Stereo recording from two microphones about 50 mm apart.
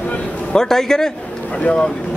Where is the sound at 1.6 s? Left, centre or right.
Left.